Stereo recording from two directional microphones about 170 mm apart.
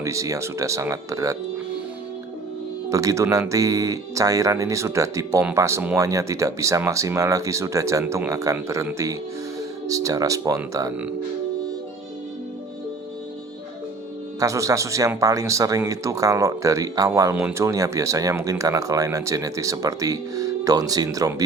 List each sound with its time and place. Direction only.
0.0 s speech: 20° right (ahead or behind)
2.9 s speech: 20° right (ahead or behind)
14.3 s speech: 20° right (ahead or behind)